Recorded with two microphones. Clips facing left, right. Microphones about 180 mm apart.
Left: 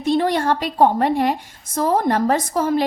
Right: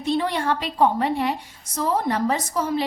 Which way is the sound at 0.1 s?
45° left (ahead or behind).